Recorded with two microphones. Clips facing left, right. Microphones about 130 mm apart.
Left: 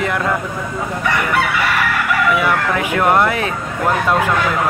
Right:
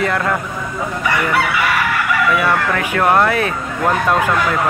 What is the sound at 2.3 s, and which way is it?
Speech, 15° left (ahead or behind).